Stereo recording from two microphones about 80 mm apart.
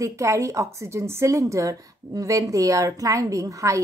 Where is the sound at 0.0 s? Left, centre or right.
Right.